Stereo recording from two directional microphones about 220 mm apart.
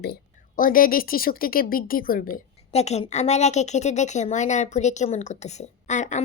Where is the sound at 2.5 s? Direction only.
30° left (ahead or behind).